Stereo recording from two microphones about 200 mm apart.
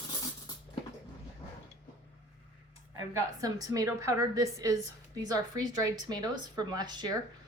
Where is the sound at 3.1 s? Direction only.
15° right (ahead or behind).